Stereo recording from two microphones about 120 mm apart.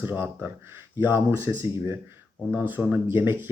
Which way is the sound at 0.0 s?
20° right (ahead or behind).